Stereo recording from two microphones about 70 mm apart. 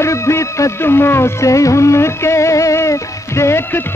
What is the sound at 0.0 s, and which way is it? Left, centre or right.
Music, left.